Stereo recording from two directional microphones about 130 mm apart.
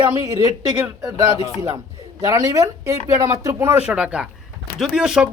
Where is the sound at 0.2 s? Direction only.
25° right (ahead or behind).